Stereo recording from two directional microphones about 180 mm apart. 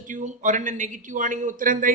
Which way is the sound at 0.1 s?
45° right (ahead or behind).